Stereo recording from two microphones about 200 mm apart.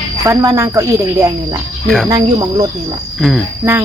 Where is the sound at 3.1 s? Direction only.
Centre (ahead or behind).